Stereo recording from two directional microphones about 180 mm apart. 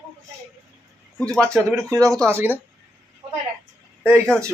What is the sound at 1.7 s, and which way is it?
Speech, 15° right (ahead or behind).